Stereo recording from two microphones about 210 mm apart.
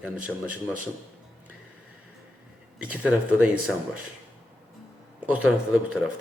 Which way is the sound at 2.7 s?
5° right (ahead or behind).